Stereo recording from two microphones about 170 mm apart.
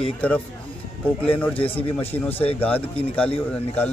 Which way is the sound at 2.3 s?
35° left (ahead or behind).